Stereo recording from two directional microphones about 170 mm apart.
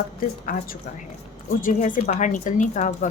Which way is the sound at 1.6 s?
50° left (ahead or behind).